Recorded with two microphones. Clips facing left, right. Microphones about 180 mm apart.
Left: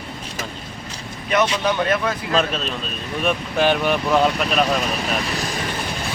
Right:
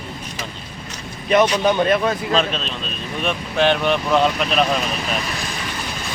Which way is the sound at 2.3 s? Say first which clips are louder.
Even; 5° left (ahead or behind).